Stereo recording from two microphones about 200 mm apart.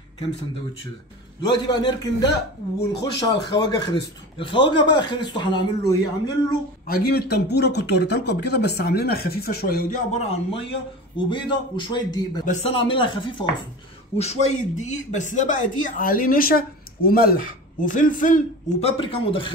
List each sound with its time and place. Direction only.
1.4 s speech: 20° left (ahead or behind)
6.9 s speech: 50° left (ahead or behind); by 10.6 s 35° left (ahead or behind)
11.1 s speech: 25° left (ahead or behind); by 18.9 s 40° left (ahead or behind)
18.9 s speech: 25° left (ahead or behind)